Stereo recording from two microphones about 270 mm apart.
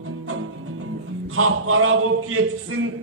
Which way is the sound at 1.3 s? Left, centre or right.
Right.